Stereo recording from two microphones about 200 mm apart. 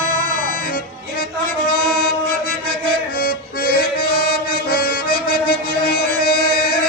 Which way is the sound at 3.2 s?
50° left (ahead or behind).